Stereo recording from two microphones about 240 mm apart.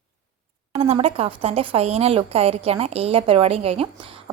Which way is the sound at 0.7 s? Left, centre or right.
Right.